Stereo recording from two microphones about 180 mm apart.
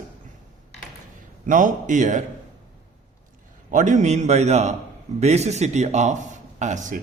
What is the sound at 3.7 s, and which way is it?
Speech, 45° right (ahead or behind).